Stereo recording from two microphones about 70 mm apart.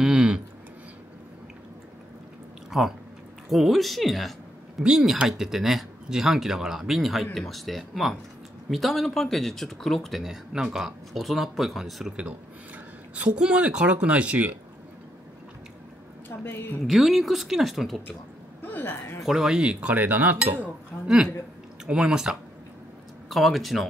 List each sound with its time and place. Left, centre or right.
0.0 s a sound: centre
2.7 s speech: centre
12.2 s speech: centre
16.3 s a woman's voice: left
16.8 s speech: centre
18.6 s a woman's voice: left
19.2 s speech: centre; by 20.3 s right
21.8 s speech: centre
23.3 s speech: centre